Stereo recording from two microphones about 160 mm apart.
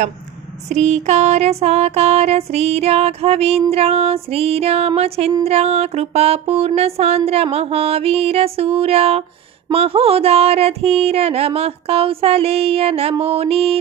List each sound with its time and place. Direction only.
0.7 s music: 45° right (ahead or behind)